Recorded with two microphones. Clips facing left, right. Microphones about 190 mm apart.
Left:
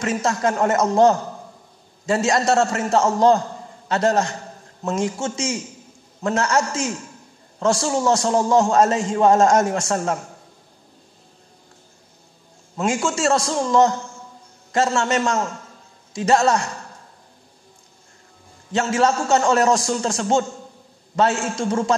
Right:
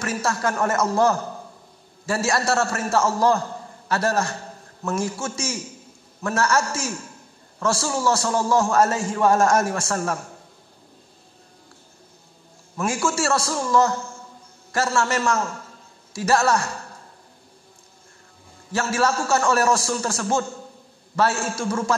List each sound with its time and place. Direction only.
0.0 s a man's voice: 20° left (ahead or behind)
2.0 s a man's voice: 20° left (ahead or behind)
12.7 s a man's voice: 25° left (ahead or behind)
18.7 s a man's voice: 20° left (ahead or behind)